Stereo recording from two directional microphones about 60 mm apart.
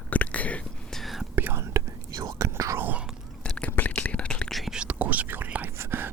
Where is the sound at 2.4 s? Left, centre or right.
Right.